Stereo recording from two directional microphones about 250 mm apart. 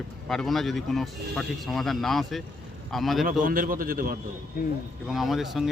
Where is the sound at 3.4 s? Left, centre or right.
Right.